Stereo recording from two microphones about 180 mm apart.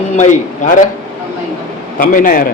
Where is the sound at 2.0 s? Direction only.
50° left (ahead or behind).